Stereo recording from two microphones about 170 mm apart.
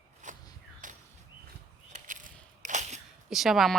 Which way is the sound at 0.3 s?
45° right (ahead or behind).